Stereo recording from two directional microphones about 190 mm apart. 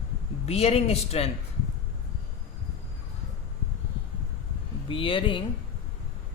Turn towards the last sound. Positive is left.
turn(degrees=25)  # may be behind; listen again after turning